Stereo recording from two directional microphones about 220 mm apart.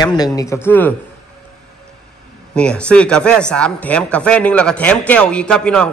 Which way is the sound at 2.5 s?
5° left (ahead or behind).